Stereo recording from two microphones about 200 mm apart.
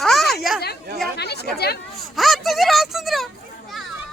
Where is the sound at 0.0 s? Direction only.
Centre (ahead or behind).